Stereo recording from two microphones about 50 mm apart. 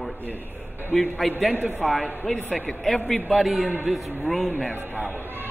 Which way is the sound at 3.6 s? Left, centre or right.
Right.